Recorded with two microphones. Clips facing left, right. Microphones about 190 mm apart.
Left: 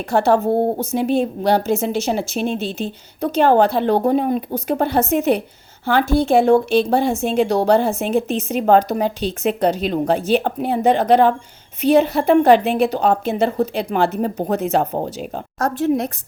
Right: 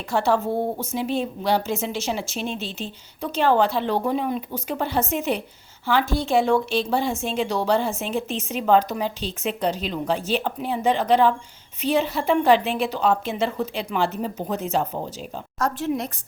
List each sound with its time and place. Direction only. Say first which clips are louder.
0.1 s a woman's voice: left 6 dB; 60° left (ahead or behind)